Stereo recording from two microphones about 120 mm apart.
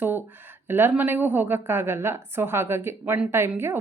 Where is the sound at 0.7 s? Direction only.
15° right (ahead or behind).